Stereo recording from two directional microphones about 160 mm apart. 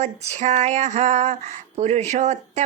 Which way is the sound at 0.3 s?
45° right (ahead or behind).